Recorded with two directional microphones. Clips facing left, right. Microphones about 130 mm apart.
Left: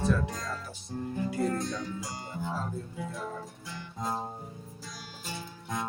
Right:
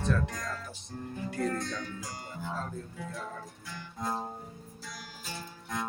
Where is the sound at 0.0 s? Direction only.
5° left (ahead or behind).